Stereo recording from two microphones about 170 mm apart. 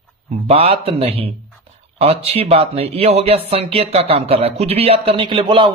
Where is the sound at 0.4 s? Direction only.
35° right (ahead or behind).